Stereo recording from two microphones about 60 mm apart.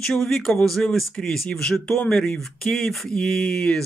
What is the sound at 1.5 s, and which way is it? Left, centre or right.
Speech, centre.